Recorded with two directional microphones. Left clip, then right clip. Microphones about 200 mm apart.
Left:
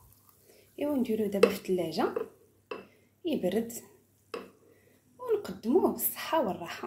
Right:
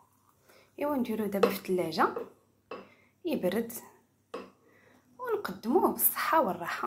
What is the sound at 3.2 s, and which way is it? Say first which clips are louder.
Dishes: even; 10° left (ahead or behind).